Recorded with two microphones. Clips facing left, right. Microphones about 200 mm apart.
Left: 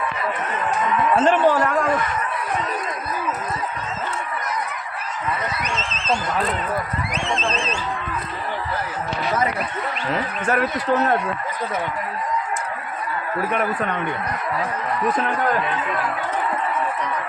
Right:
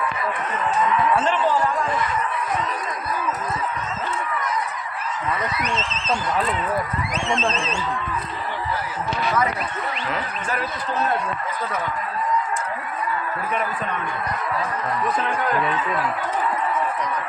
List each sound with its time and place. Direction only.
1.2 s speech: 60° left (ahead or behind)
10.4 s speech: 60° left (ahead or behind)